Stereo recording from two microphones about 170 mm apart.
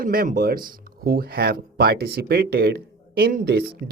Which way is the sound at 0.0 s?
55° right (ahead or behind).